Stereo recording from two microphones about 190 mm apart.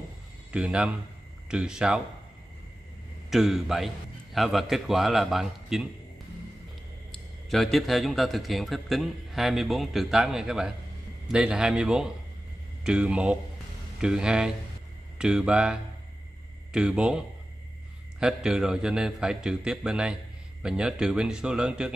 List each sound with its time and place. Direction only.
0.5 s a man's voice: 5° right (ahead or behind)
3.3 s a man's voice: centre (ahead or behind)
7.4 s a man's voice: centre (ahead or behind)
18.2 s a man's voice: 5° right (ahead or behind)